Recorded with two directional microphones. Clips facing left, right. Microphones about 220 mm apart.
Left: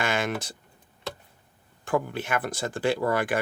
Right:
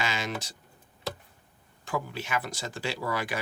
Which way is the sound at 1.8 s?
55° left (ahead or behind).